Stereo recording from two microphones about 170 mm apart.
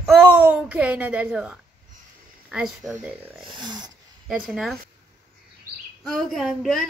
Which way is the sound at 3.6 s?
25° right (ahead or behind).